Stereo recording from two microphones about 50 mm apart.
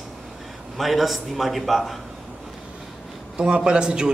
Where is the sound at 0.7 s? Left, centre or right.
Centre.